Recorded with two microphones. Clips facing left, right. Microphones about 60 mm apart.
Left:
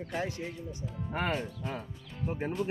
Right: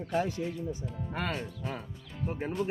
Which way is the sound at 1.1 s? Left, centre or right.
Left.